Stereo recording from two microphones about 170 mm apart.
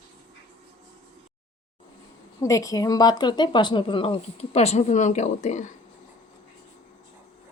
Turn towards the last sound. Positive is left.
turn(degrees=45)  # may be behind; listen again after turning